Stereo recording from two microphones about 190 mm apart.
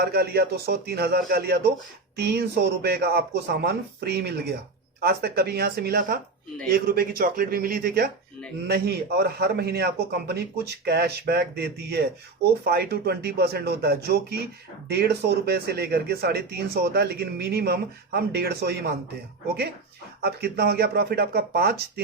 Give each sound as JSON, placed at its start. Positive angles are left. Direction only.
{"t": 0.0, "sound": "speech", "side_deg": -55}
{"t": 20.2, "sound": "speech", "side_deg": -55}